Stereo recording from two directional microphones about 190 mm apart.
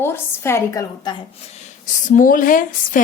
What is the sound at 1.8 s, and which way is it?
Speech, 40° left (ahead or behind).